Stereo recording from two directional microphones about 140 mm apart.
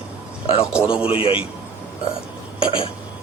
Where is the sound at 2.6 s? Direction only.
40° left (ahead or behind).